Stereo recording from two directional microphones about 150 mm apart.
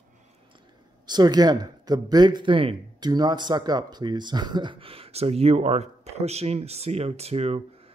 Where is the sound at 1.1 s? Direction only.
25° right (ahead or behind).